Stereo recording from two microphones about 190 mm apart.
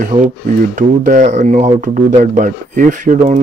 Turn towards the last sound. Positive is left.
turn(degrees=-40)  # may be behind; listen again after turning